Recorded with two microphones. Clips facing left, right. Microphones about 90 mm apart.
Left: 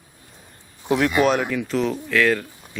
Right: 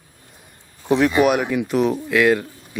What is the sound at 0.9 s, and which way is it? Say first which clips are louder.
Speech: right 2 dB; 10° right (ahead or behind).